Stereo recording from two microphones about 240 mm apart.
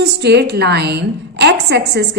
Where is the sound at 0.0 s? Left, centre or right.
Right.